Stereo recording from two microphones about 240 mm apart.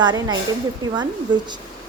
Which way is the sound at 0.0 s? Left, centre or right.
Centre.